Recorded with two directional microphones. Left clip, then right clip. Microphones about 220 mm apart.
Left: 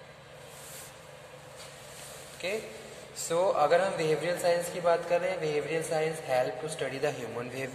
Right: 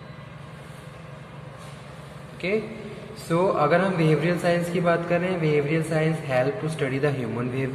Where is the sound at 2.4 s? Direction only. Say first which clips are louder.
Right 8 dB; 15° left (ahead or behind).